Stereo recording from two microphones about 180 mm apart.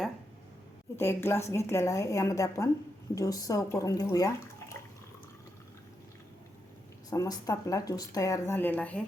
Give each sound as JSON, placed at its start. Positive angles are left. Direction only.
{"t": 0.9, "sound": "a woman's voice", "side_deg": 15}
{"t": 7.1, "sound": "speech", "side_deg": 20}